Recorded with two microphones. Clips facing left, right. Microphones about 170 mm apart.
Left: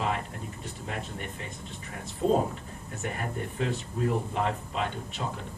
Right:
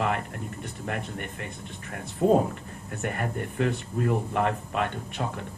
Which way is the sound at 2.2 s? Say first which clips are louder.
Right 4 dB; 65° right (ahead or behind).